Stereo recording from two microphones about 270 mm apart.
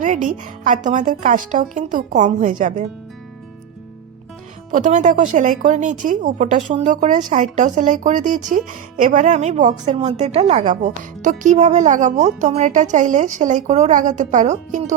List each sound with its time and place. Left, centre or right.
0.0 s speech: right
4.7 s speech: right